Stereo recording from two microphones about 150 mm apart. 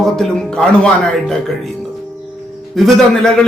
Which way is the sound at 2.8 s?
Centre (ahead or behind).